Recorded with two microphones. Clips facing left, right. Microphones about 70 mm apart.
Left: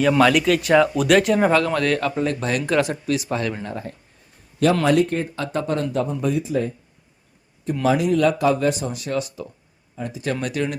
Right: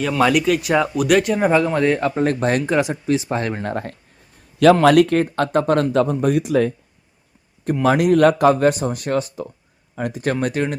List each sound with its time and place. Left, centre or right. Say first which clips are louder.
0.2 s speech: even; centre; by 2.6 s right
2.6 s speech: right 1 dB; centre
3.1 s speech: right 3 dB; right
3.6 s speech: right 5 dB; right
5.2 s speech: right 7 dB; right
5.9 s speech: right 6 dB; right
6.2 s speech: right 5 dB; right
7.9 s speech: right 4 dB; right
9.9 s speech: right 4 dB; right
10.4 s speech: right 2 dB; right